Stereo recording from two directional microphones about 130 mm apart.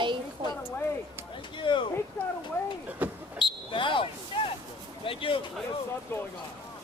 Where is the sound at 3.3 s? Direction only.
40° left (ahead or behind).